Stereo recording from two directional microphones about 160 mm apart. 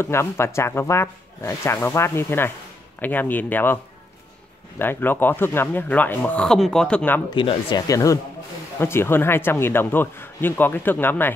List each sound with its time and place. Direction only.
0.0 s speech: 15° left (ahead or behind)
7.2 s speech: 30° left (ahead or behind); by 11.3 s 15° left (ahead or behind)